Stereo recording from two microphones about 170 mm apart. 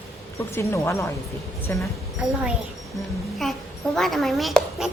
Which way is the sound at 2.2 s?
5° right (ahead or behind).